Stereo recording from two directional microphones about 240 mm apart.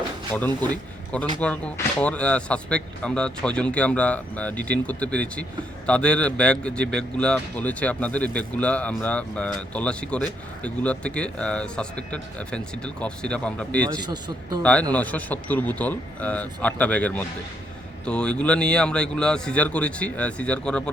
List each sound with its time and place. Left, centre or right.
0.7 s speech: centre
13.9 s a man's voice: centre
14.6 s speech: centre